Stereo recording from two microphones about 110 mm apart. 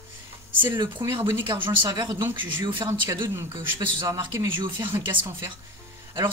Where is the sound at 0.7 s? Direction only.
45° right (ahead or behind).